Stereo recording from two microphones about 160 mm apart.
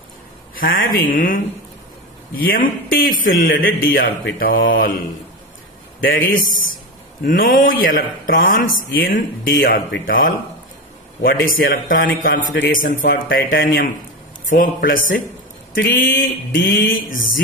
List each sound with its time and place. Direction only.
0.5 s speech: 65° left (ahead or behind)
6.1 s speech: 60° left (ahead or behind)